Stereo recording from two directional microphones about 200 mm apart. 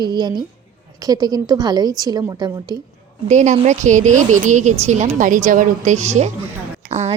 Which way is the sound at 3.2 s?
35° right (ahead or behind).